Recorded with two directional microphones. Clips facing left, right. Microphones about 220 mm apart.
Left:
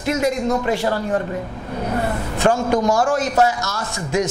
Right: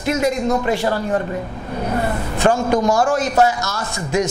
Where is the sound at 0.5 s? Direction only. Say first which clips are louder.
Right 1 dB; 25° right (ahead or behind).